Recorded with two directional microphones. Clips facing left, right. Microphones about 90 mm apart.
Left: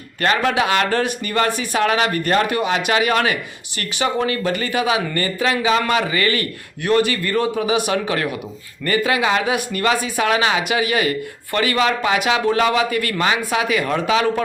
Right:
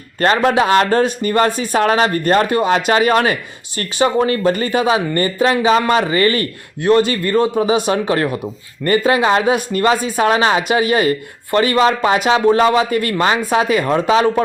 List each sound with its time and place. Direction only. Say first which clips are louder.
0.2 s speech: right 4 dB; 35° right (ahead or behind)